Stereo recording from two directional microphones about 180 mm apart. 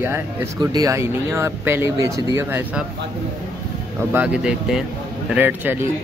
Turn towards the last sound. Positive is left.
turn(degrees=-10)  # may be behind; listen again after turning